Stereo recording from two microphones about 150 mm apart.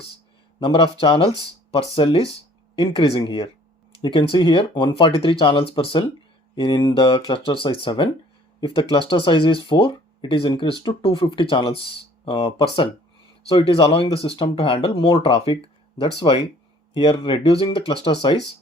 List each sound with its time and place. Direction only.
0.6 s speech: 35° left (ahead or behind)